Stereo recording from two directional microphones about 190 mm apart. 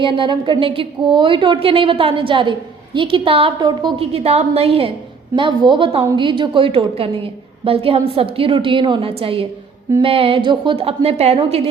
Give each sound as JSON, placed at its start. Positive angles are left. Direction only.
{"t": 0.0, "sound": "a woman's voice", "side_deg": -25}